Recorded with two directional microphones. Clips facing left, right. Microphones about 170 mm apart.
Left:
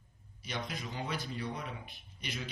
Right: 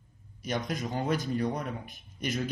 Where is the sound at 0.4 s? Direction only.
45° right (ahead or behind).